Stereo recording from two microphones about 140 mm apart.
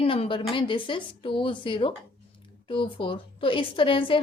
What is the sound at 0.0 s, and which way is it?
A woman's voice, 40° left (ahead or behind).